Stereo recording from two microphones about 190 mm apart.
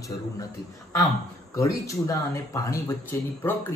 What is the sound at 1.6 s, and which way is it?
A man's voice, 15° left (ahead or behind).